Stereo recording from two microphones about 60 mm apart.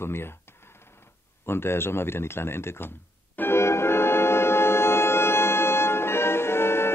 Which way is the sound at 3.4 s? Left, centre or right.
Left.